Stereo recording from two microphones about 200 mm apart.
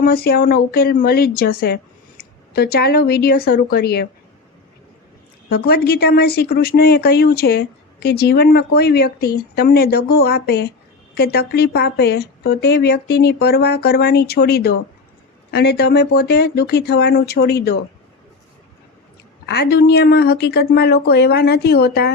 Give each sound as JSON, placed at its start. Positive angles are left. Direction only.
{"t": 0.0, "sound": "speech", "side_deg": 50}
{"t": 5.5, "sound": "speech", "side_deg": 50}
{"t": 19.5, "sound": "speech", "side_deg": 55}